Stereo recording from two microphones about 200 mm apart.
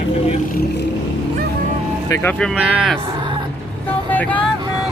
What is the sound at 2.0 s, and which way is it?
Speech, 10° left (ahead or behind).